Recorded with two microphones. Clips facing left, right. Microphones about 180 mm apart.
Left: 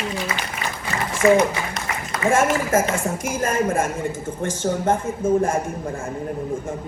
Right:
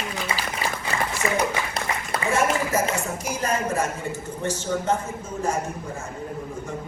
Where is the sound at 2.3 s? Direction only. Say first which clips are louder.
Left 4 dB; 50° left (ahead or behind).